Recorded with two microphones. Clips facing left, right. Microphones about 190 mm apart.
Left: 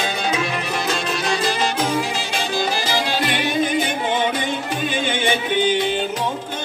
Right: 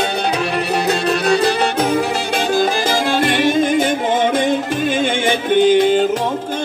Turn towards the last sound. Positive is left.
turn(degrees=-50)  # may be behind; listen again after turning